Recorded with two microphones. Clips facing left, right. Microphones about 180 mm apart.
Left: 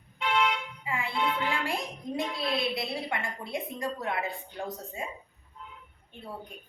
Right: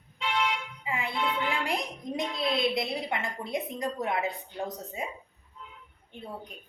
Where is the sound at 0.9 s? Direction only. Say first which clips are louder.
Right 1 dB; 20° right (ahead or behind).